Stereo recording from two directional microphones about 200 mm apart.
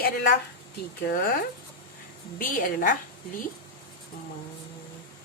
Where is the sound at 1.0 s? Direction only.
45° left (ahead or behind).